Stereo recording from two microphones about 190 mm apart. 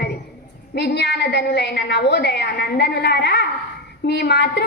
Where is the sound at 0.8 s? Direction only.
60° left (ahead or behind).